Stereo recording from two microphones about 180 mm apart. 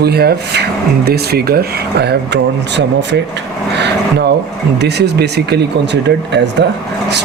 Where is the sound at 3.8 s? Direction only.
70° right (ahead or behind).